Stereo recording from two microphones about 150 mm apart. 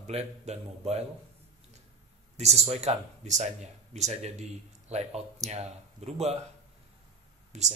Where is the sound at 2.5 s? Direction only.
45° right (ahead or behind).